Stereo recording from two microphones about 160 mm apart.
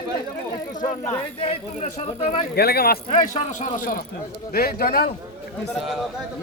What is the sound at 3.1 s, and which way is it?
Speech, 55° left (ahead or behind).